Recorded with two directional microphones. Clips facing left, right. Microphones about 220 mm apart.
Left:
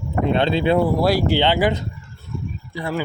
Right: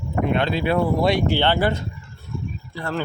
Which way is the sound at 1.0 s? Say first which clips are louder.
Left 1 dB; centre (ahead or behind).